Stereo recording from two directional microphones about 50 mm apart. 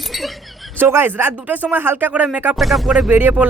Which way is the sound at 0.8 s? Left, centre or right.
Right.